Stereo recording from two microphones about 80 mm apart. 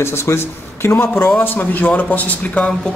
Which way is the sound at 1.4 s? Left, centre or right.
Left.